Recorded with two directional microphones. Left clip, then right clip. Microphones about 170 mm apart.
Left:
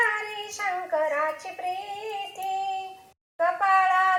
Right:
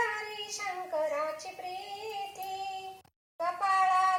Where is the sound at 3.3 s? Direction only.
25° left (ahead or behind).